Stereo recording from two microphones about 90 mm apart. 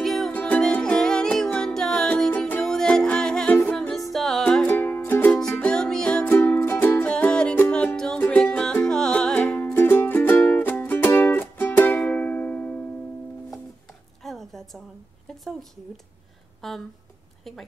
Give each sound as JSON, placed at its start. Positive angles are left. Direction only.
{"t": 0.0, "sound": "music", "side_deg": 5}
{"t": 0.3, "sound": "music", "side_deg": 15}
{"t": 2.3, "sound": "music", "side_deg": 20}
{"t": 2.6, "sound": "music", "side_deg": 5}
{"t": 4.6, "sound": "music", "side_deg": 20}
{"t": 5.4, "sound": "music", "side_deg": 10}
{"t": 6.2, "sound": "music", "side_deg": 20}
{"t": 9.7, "sound": "music", "side_deg": 25}
{"t": 14.2, "sound": "a sound", "side_deg": 5}
{"t": 16.6, "sound": "a sound", "side_deg": 0}